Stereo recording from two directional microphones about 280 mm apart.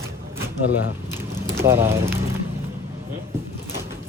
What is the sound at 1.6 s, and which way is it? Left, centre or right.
Speech, centre.